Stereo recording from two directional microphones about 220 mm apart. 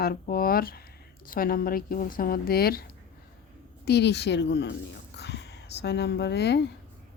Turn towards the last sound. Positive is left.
turn(degrees=50)  # may be behind; listen again after turning